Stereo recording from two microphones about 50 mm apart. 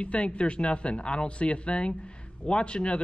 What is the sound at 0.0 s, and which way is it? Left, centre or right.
Speech, left.